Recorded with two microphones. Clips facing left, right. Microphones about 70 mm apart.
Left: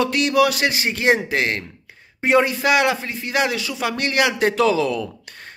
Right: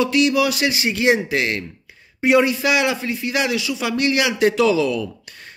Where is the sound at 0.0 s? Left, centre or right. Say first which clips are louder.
Even; left.